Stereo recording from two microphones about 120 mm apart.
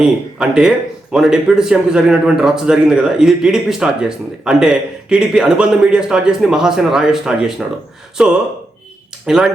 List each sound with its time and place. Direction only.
0.0 s a man's voice: 5° right (ahead or behind)